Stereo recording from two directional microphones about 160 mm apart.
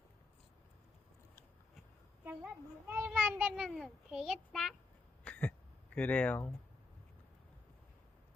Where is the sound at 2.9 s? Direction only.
10° right (ahead or behind).